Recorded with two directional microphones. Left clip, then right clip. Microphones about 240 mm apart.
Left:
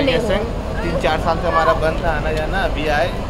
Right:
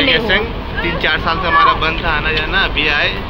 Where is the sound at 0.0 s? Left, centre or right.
Centre.